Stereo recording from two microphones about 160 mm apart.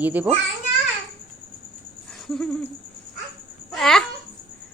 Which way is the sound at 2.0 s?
Centre (ahead or behind).